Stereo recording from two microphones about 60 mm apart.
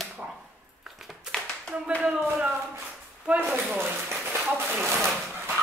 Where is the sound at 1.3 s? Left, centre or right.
Centre.